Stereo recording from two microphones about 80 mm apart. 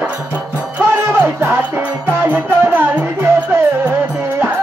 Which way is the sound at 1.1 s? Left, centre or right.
Right.